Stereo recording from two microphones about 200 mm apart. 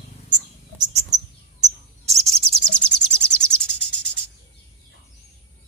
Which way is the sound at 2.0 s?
30° right (ahead or behind).